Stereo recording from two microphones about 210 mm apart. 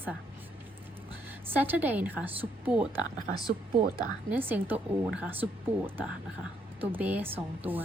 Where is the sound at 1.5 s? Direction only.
10° right (ahead or behind).